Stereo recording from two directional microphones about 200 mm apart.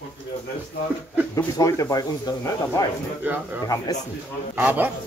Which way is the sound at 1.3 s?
15° left (ahead or behind).